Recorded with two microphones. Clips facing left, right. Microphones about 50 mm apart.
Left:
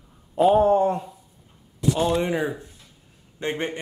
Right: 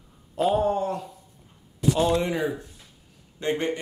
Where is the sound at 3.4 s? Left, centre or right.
Left.